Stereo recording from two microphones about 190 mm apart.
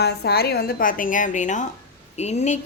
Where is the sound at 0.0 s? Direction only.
55° left (ahead or behind).